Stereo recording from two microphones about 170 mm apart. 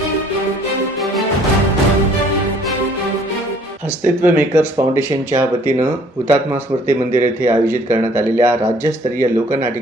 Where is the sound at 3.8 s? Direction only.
10° right (ahead or behind).